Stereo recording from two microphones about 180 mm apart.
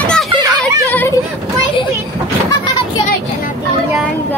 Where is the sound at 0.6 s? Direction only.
10° left (ahead or behind).